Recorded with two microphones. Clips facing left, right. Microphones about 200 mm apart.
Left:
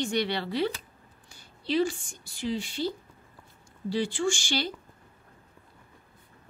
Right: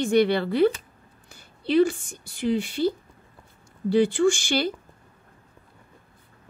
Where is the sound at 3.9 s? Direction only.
55° right (ahead or behind).